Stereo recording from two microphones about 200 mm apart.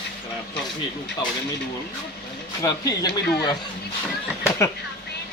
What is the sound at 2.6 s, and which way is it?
Speech, 20° left (ahead or behind).